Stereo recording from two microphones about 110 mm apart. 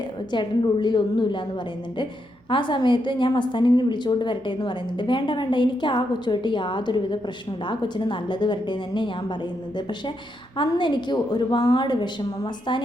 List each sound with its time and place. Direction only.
0.3 s a woman's voice: 45° left (ahead or behind)
2.5 s a woman's voice: 45° left (ahead or behind)
10.6 s a woman's voice: 45° left (ahead or behind)